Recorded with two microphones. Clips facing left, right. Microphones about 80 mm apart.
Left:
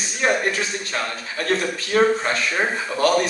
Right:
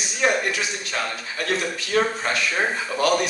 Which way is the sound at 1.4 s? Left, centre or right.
Left.